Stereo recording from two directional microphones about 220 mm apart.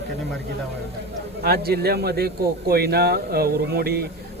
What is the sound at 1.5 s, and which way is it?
A man's voice, 45° right (ahead or behind).